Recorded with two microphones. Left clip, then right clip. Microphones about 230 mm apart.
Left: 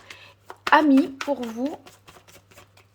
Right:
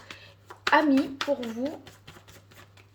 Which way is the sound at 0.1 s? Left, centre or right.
Centre.